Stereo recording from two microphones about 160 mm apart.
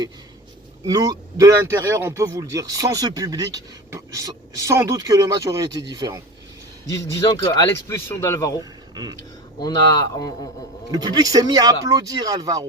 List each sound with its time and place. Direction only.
0.9 s speech: 20° right (ahead or behind)
6.9 s speech: 20° left (ahead or behind)
10.9 s speech: 25° right (ahead or behind)